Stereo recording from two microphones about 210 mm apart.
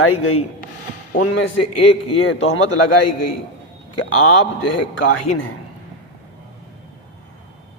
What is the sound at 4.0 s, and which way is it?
Speech, 90° left.